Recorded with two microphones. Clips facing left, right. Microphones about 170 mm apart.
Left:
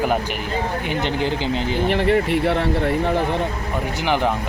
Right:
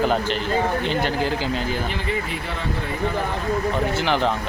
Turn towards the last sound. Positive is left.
turn(degrees=15)  # may be behind; listen again after turning